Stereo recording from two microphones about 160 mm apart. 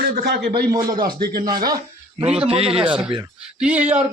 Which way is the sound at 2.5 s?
35° right (ahead or behind).